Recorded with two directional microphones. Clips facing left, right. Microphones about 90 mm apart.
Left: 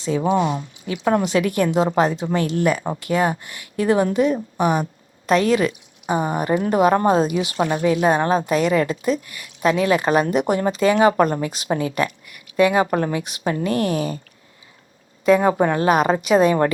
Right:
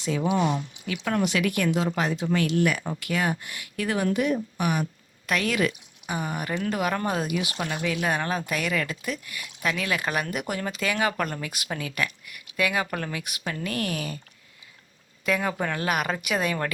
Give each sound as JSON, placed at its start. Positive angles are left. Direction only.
{"t": 0.3, "sound": "a woman's voice", "side_deg": 35}
{"t": 15.2, "sound": "a woman's voice", "side_deg": 30}